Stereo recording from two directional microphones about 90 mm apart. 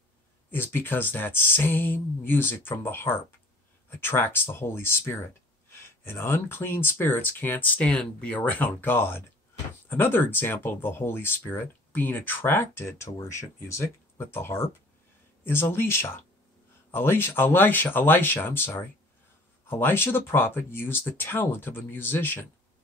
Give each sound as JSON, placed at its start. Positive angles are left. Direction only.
{"t": 0.5, "sound": "speech", "side_deg": 25}